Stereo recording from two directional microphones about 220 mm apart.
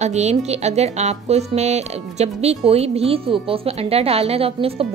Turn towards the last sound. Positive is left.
turn(degrees=-25)  # may be behind; listen again after turning